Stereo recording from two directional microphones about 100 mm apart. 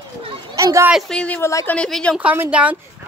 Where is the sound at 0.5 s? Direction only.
30° right (ahead or behind).